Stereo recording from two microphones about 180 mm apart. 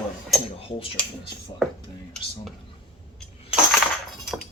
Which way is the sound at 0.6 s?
30° left (ahead or behind).